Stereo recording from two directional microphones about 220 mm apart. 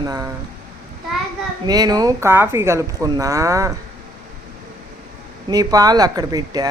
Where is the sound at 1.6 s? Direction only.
15° right (ahead or behind).